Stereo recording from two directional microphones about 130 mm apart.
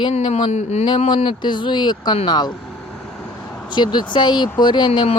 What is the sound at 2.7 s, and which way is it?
Vehicle, centre (ahead or behind).